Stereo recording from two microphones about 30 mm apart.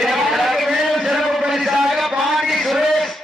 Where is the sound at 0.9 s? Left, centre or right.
Centre.